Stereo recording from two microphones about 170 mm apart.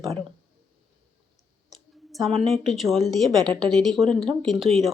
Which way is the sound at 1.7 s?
Centre (ahead or behind).